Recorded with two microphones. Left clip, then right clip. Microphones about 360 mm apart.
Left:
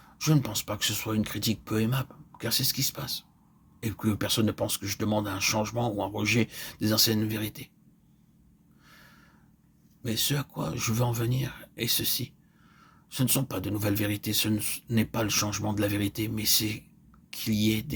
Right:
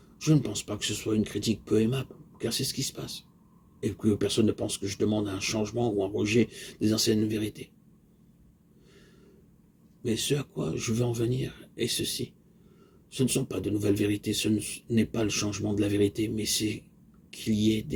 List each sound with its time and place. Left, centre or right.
0.2 s speech: left
10.0 s speech: left